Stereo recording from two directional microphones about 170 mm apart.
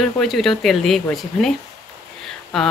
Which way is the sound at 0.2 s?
Centre (ahead or behind).